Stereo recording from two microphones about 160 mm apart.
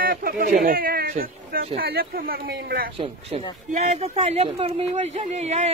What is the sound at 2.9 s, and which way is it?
Speech, 40° right (ahead or behind).